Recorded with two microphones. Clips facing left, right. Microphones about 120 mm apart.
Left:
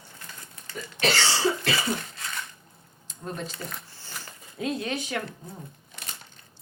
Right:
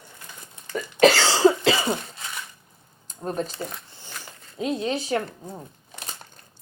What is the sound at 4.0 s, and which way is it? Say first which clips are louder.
Speech: right 1 dB; 20° right (ahead or behind).